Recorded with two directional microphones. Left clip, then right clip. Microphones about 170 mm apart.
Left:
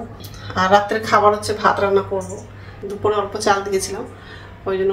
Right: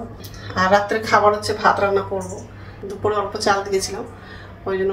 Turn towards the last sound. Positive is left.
turn(degrees=10)  # may be behind; listen again after turning